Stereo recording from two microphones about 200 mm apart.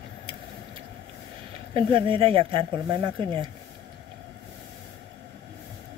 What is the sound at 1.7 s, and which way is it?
Speech, 25° right (ahead or behind).